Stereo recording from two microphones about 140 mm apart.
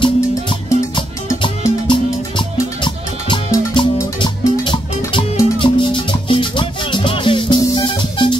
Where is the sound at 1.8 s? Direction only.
35° left (ahead or behind).